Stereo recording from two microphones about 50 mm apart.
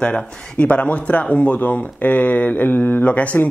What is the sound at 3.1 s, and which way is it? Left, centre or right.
Speech, left.